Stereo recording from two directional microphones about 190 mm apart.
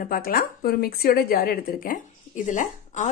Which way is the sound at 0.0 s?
50° left (ahead or behind).